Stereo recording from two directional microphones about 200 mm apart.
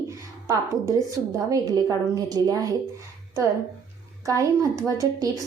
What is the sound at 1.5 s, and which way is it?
A woman's voice, 15° right (ahead or behind).